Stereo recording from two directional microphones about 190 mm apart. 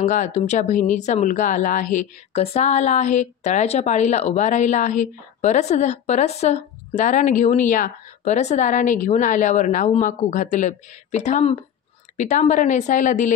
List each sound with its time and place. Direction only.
0.0 s speech: 40° left (ahead or behind)